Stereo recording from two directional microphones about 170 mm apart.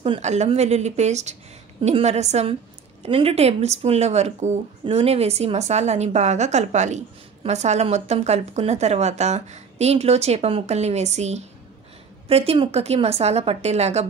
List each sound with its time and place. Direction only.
0.0 s speech: 35° right (ahead or behind)